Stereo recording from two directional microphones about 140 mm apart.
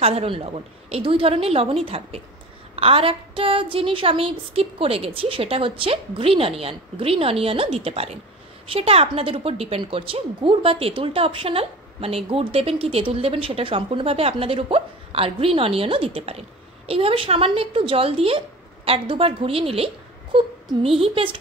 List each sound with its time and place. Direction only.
0.0 s a woman's voice: 45° right (ahead or behind)